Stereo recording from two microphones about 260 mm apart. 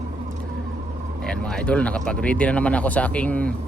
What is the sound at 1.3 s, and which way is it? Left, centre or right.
Speech, centre.